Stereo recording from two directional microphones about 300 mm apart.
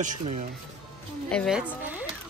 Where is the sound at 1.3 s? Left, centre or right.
Centre.